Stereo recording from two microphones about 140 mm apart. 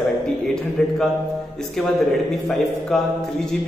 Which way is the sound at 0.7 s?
5° left (ahead or behind).